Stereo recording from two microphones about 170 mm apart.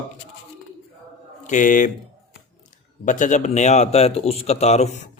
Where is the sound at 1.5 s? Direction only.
50° left (ahead or behind).